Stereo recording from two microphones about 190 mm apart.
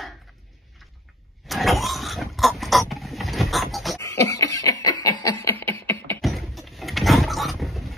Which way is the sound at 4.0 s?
15° left (ahead or behind).